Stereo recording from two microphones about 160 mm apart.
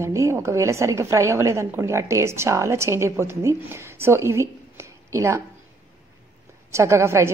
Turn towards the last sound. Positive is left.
turn(degrees=-15)  # may be behind; listen again after turning